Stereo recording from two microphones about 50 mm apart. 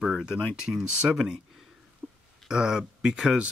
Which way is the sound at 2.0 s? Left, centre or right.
Centre.